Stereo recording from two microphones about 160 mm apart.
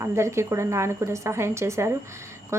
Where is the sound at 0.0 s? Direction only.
15° right (ahead or behind).